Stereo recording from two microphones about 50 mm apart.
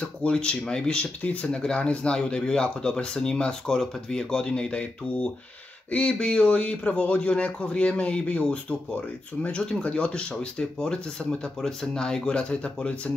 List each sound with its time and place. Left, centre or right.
0.2 s speech: left
6.1 s speech: centre